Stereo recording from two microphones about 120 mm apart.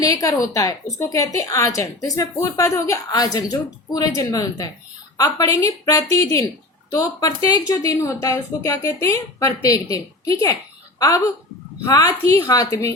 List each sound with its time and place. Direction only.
0.0 s a woman's voice: 30° left (ahead or behind)
11.9 s a woman's voice: 30° left (ahead or behind)